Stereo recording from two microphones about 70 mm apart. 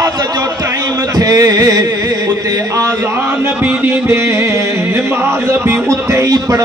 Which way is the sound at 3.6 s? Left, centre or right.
Right.